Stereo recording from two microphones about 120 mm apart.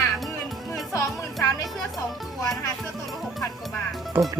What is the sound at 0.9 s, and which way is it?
Music, 25° left (ahead or behind).